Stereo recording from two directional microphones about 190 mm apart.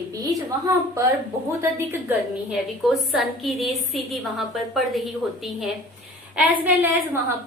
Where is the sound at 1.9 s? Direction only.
10° right (ahead or behind).